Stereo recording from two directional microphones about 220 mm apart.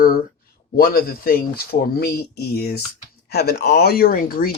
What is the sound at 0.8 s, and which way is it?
Speech, 40° left (ahead or behind).